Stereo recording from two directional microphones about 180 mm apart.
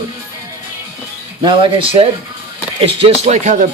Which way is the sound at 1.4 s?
25° right (ahead or behind).